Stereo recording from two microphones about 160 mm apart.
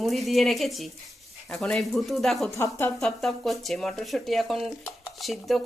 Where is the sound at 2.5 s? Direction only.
15° left (ahead or behind).